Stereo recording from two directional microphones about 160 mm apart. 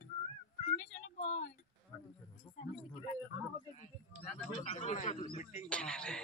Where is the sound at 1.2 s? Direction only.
50° left (ahead or behind).